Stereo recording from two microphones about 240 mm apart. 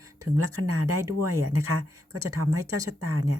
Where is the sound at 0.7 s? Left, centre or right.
Right.